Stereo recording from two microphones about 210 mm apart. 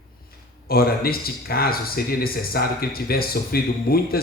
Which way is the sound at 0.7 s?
45° left (ahead or behind).